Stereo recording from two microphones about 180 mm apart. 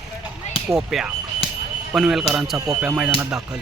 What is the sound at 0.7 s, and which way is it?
Speech, 5° right (ahead or behind).